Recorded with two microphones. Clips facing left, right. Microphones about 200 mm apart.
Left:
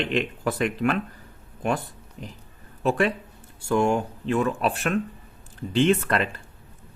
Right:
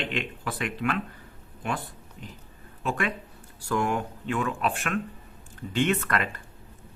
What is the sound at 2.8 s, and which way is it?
Speech, 35° left (ahead or behind).